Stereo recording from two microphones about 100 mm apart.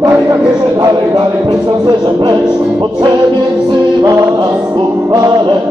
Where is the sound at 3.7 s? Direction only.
45° right (ahead or behind).